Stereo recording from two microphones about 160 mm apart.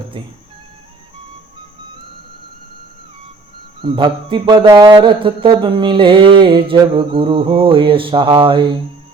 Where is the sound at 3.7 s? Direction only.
30° right (ahead or behind).